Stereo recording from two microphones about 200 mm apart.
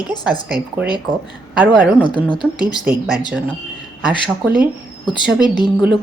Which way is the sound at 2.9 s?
5° right (ahead or behind).